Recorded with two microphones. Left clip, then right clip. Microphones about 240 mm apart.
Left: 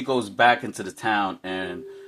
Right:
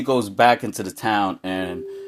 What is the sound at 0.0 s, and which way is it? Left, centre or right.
Speech, right.